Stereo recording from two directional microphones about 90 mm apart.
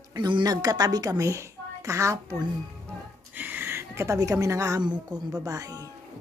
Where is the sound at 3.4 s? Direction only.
20° right (ahead or behind); by 4.7 s 35° right (ahead or behind).